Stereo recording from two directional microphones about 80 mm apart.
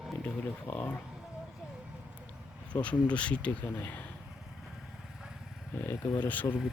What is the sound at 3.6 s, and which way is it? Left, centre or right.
Speech, left.